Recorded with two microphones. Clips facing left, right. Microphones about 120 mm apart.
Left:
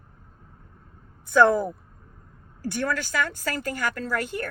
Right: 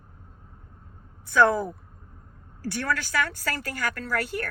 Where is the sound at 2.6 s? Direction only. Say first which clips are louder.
Left 1 dB; 20° left (ahead or behind).